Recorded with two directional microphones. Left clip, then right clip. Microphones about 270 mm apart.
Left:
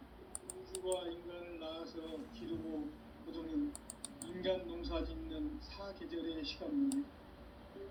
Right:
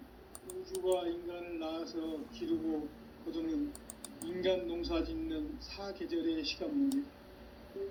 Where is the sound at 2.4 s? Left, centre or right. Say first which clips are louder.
Right 10 dB; right.